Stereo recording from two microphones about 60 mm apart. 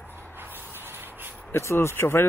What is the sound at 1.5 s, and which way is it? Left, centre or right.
Speech, left.